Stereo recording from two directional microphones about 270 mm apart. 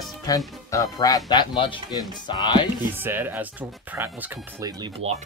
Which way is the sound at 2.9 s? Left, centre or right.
Centre.